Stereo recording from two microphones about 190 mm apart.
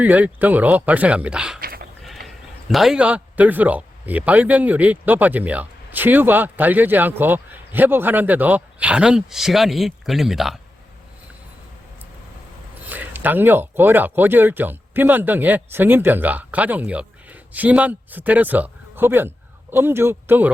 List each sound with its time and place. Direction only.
0.0 s a man's voice: 10° right (ahead or behind)
1.6 s dog: 50° right (ahead or behind)
2.2 s a man's voice: centre (ahead or behind)
12.9 s a man's voice: 10° right (ahead or behind)